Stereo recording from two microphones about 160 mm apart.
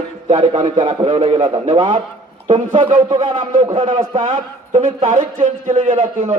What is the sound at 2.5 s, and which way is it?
Speech, 50° right (ahead or behind).